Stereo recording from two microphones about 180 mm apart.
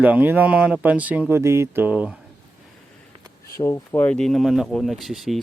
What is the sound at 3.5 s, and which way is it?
Speech, 15° left (ahead or behind).